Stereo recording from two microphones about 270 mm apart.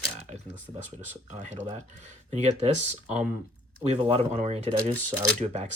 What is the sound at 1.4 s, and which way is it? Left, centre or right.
Speech, right.